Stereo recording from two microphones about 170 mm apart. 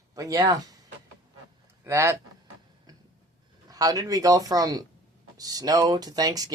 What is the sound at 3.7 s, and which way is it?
Speech, 20° right (ahead or behind).